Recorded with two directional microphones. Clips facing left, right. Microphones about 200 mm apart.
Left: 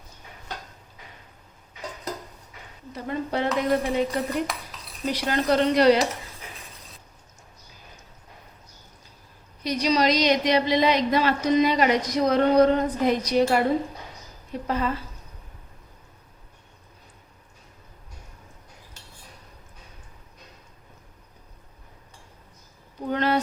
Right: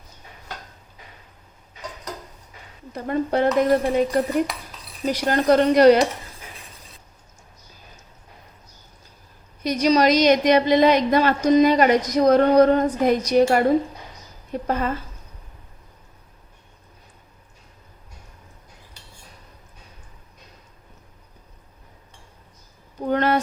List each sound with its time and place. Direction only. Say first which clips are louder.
2.9 s a woman's voice: right 6 dB; 50° right (ahead or behind)
9.6 s a woman's voice: right 4 dB; 45° right (ahead or behind)
23.0 s a sound: right 3 dB; 50° right (ahead or behind)